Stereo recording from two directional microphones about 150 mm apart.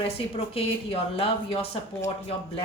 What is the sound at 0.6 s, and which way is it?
Speech, 40° left (ahead or behind).